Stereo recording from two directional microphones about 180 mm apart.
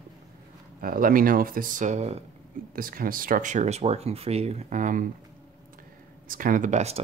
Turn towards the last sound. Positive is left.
turn(degrees=-40)  # may be behind; listen again after turning